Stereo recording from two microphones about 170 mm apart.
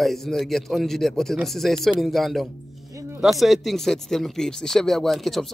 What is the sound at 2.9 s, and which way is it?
Music, 15° right (ahead or behind).